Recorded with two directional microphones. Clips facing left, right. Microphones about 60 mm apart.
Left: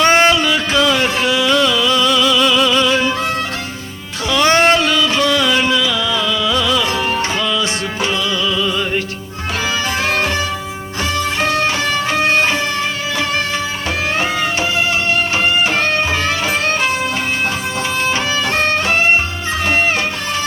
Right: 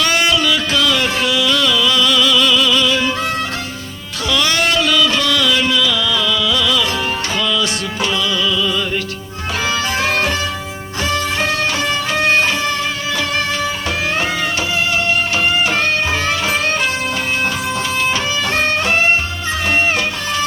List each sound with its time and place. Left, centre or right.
0.0 s music: left
4.3 s music: left